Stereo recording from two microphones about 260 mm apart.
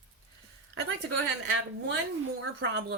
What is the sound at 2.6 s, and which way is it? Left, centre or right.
Speech, right.